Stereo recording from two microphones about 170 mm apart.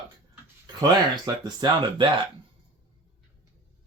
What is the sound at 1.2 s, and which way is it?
Speech, 25° right (ahead or behind).